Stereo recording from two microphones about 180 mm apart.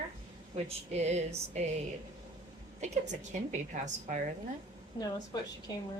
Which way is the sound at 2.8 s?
40° right (ahead or behind).